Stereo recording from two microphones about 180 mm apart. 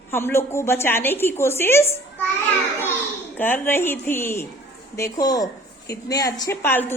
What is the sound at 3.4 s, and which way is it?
A woman's voice, 10° left (ahead or behind).